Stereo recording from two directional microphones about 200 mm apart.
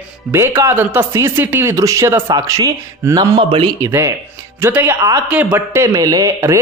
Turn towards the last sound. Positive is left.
turn(degrees=-15)  # may be behind; listen again after turning